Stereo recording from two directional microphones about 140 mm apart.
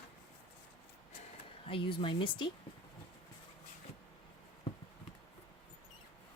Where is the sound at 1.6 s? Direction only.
40° left (ahead or behind).